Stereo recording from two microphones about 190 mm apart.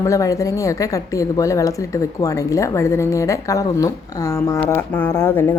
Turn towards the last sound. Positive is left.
turn(degrees=10)  # may be behind; listen again after turning